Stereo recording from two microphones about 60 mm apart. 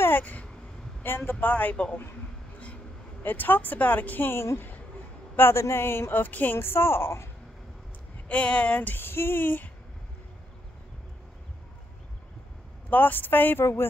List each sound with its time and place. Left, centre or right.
0.2 s speech: left
1.0 s speech: left
1.4 s speech: left
3.2 s speech: left
4.4 s speech: left
6.2 s speech: left
6.6 s speech: left
8.3 s speech: left
8.9 s speech: left
12.9 s speech: left